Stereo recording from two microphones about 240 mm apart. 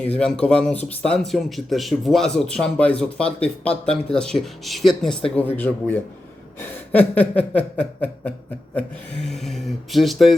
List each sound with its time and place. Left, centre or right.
0.2 s speech: centre
6.6 s a sound: centre
9.2 s speech: centre